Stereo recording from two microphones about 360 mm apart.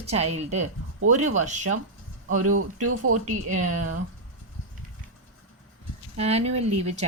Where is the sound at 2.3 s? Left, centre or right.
Right.